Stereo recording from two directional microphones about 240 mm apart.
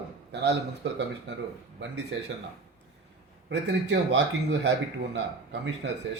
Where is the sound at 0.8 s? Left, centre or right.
Right.